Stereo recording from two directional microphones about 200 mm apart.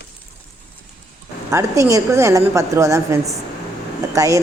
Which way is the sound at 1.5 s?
15° right (ahead or behind).